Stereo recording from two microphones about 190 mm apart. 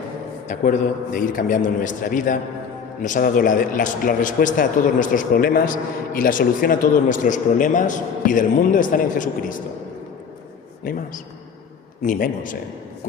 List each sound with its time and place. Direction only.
0.4 s a man's voice: 40° left (ahead or behind)
10.9 s a man's voice: 45° left (ahead or behind)
12.0 s a man's voice: 45° left (ahead or behind)